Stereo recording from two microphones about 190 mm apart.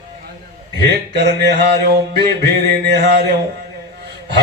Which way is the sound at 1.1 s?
60° right (ahead or behind).